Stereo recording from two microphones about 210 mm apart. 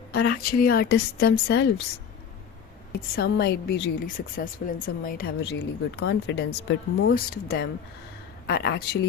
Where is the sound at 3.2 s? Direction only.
50° left (ahead or behind).